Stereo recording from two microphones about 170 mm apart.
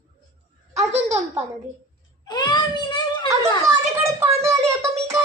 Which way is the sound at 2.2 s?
25° left (ahead or behind).